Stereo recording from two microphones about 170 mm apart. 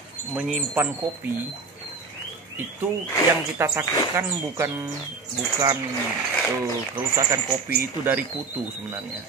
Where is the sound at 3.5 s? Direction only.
15° right (ahead or behind).